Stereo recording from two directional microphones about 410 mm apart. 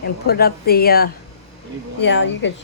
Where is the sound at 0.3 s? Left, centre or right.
Left.